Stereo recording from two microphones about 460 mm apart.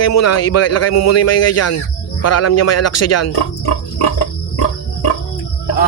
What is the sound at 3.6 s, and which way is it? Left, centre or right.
Frog, left.